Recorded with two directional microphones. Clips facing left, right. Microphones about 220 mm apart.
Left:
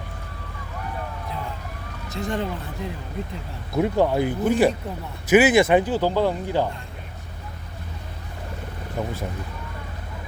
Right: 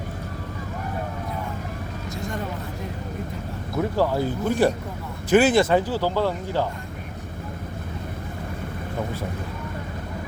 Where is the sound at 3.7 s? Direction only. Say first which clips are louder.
Left 2 dB; 20° left (ahead or behind).